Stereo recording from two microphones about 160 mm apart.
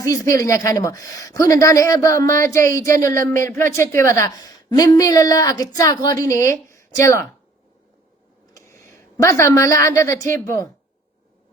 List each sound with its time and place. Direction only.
0.0 s speech: 20° left (ahead or behind)
8.5 s a woman's voice: 15° left (ahead or behind)